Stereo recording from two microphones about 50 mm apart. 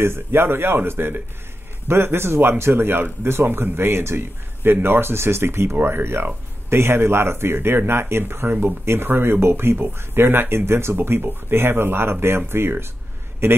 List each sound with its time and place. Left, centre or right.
0.0 s a man's voice: right
5.8 s a man's voice: right